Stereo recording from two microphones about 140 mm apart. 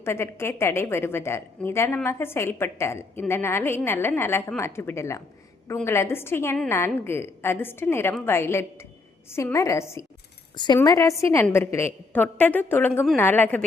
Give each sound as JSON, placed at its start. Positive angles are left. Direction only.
{"t": 0.0, "sound": "a woman's voice", "side_deg": 20}